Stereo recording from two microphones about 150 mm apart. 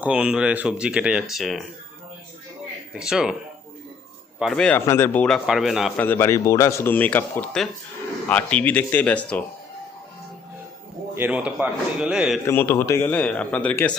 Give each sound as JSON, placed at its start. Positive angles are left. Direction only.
{"t": 0.0, "sound": "speech", "side_deg": -5}
{"t": 2.9, "sound": "a man's voice", "side_deg": -5}
{"t": 4.4, "sound": "speech", "side_deg": 0}
{"t": 4.9, "sound": "a man's voice", "side_deg": 20}
{"t": 5.5, "sound": "a man's voice", "side_deg": 0}
{"t": 6.0, "sound": "a man's voice", "side_deg": 15}
{"t": 11.2, "sound": "a man's voice", "side_deg": -10}
{"t": 12.5, "sound": "a man's voice", "side_deg": 15}